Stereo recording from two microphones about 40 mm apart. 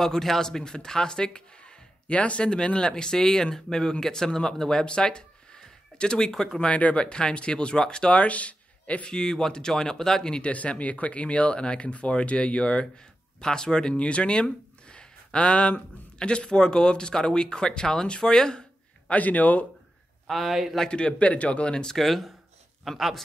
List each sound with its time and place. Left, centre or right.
0.0 s speech: centre
8.2 s speech: left
9.1 s speech: centre
10.5 s speech: left
12.9 s speech: centre
19.0 s speech: left
20.2 s speech: centre
20.9 s speech: left
21.9 s speech: centre